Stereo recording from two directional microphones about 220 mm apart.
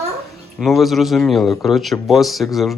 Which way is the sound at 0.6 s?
Centre (ahead or behind).